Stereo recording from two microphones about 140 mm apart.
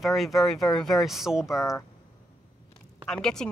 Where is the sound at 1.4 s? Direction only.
20° left (ahead or behind).